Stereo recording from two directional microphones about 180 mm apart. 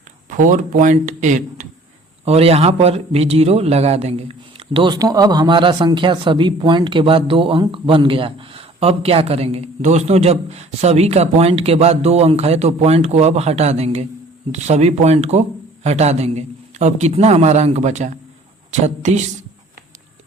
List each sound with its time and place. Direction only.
0.3 s a man's voice: 45° right (ahead or behind)